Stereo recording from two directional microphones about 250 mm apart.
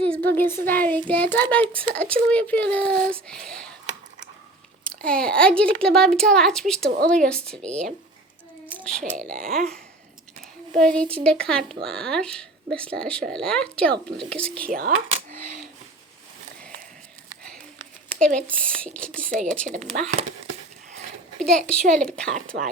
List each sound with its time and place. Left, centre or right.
0.3 s speech: centre
5.0 s speech: centre
6.9 s speech: right
7.3 s speech: centre
8.7 s a sound: centre
9.3 s speech: right
9.6 s speech: centre
14.7 s speech: right
17.4 s a sound: centre
18.3 s speech: centre
19.9 s speech: right
21.4 s speech: centre
22.5 s speech: right